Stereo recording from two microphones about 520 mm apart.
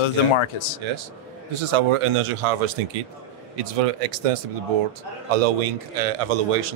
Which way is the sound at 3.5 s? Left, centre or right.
Right.